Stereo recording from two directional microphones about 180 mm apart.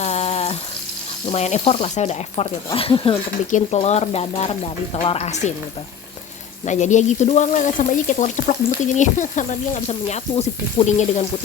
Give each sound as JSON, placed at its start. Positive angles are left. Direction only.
{"t": 0.0, "sound": "water tap", "side_deg": 35}
{"t": 1.3, "sound": "speech", "side_deg": 40}
{"t": 6.7, "sound": "speech", "side_deg": 40}